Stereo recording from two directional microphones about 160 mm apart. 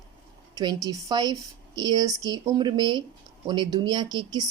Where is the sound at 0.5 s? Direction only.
25° right (ahead or behind).